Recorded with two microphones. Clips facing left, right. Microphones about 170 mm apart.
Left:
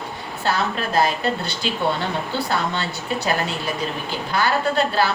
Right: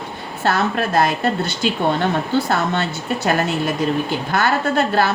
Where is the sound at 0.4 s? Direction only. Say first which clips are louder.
Right 4 dB; 50° right (ahead or behind).